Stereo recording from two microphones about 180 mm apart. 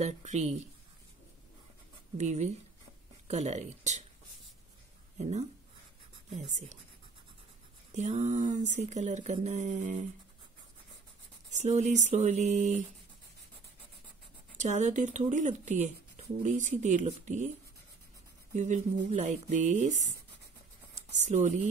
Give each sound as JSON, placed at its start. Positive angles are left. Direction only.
{"t": 0.0, "sound": "speech", "side_deg": -40}
{"t": 2.1, "sound": "speech", "side_deg": -40}
{"t": 5.2, "sound": "speech", "side_deg": -40}
{"t": 7.9, "sound": "speech", "side_deg": -40}
{"t": 11.5, "sound": "speech", "side_deg": -40}
{"t": 14.6, "sound": "speech", "side_deg": -40}
{"t": 18.5, "sound": "speech", "side_deg": -40}